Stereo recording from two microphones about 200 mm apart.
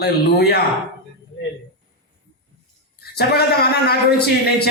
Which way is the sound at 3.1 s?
50° left (ahead or behind).